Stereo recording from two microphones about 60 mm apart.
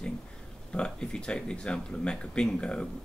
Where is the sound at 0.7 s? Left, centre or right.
Centre.